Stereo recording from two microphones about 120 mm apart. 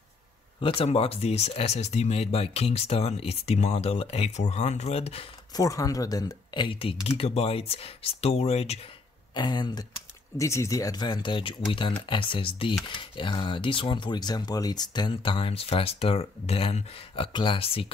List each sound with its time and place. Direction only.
0.6 s speech: 50° left (ahead or behind)
5.5 s speech: 30° left (ahead or behind); by 8.7 s 60° left (ahead or behind)
9.3 s speech: 35° left (ahead or behind)
10.3 s speech: 25° left (ahead or behind); by 17.9 s 50° left (ahead or behind)